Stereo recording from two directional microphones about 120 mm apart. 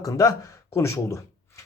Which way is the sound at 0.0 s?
30° left (ahead or behind).